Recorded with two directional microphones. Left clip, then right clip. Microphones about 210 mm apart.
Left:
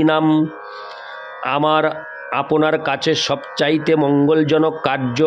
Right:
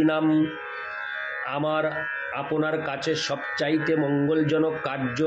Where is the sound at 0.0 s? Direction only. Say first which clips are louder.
Left 7 dB; 50° left (ahead or behind).